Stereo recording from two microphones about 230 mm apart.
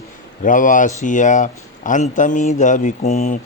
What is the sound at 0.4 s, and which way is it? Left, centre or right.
Speech, left.